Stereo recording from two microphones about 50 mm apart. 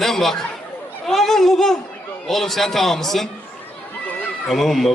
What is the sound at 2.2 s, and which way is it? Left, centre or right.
Speech, centre.